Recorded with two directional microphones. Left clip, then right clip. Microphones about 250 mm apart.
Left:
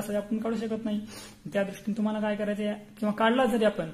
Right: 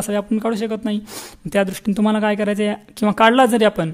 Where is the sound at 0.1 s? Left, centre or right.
Right.